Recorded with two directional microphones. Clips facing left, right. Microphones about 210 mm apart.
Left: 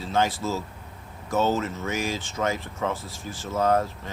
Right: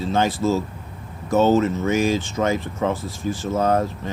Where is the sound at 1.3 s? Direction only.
65° right (ahead or behind).